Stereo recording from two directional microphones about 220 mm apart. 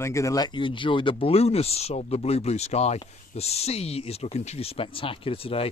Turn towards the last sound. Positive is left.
turn(degrees=25)  # may be behind; listen again after turning